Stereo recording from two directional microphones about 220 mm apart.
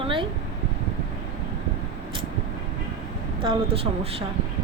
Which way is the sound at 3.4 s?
25° right (ahead or behind).